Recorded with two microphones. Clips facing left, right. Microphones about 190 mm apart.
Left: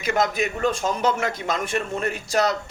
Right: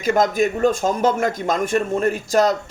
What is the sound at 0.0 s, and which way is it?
A man's voice, 45° right (ahead or behind).